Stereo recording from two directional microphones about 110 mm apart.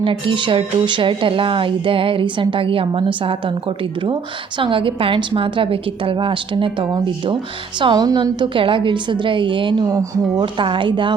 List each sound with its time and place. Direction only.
0.0 s speech: 50° right (ahead or behind)
4.6 s speech: 50° right (ahead or behind)